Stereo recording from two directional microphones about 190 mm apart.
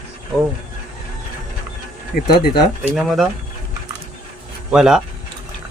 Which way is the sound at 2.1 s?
50° left (ahead or behind).